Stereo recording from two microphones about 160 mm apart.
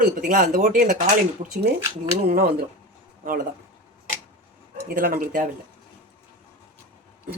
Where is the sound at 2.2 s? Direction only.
70° right (ahead or behind).